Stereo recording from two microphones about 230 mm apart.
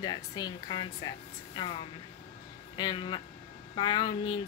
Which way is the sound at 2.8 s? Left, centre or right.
Centre.